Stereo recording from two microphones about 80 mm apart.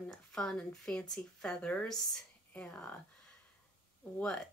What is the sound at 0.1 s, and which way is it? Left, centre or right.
Speech, centre.